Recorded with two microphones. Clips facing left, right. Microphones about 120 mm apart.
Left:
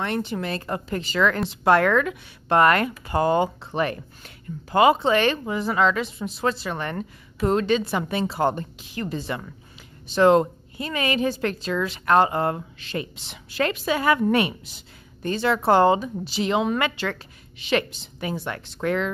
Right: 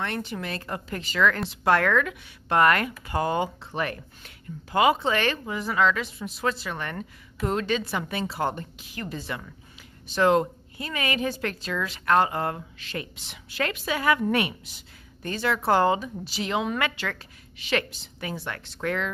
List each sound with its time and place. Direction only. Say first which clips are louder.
0.0 s speech: left 5 dB; 25° left (ahead or behind)
4.2 s speech: left 4 dB; 35° left (ahead or behind)